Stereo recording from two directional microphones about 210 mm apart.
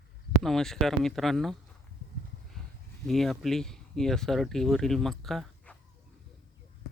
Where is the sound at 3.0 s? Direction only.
Centre (ahead or behind).